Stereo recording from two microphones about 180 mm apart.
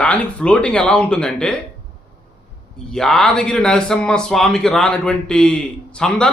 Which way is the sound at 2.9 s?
5° left (ahead or behind).